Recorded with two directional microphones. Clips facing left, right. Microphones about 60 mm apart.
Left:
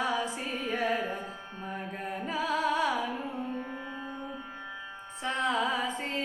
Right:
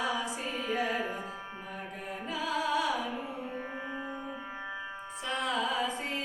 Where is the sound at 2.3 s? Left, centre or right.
Left.